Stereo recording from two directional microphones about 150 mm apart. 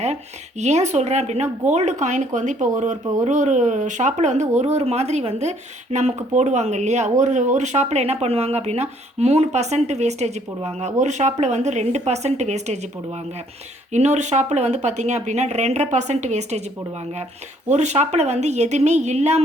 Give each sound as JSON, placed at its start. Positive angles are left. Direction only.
{"t": 0.6, "sound": "speech", "side_deg": -50}
{"t": 17.7, "sound": "speech", "side_deg": -50}